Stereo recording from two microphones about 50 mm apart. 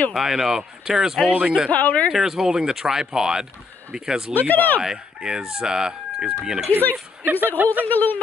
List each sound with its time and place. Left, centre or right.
0.1 s speech: centre
1.7 s speech: left
2.0 s speech: centre
4.3 s speech: left
4.8 s speech: centre
6.7 s speech: left
7.2 s a woman's voice: right
7.8 s speech: left